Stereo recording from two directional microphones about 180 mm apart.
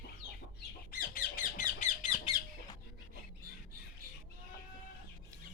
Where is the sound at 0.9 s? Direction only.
55° left (ahead or behind).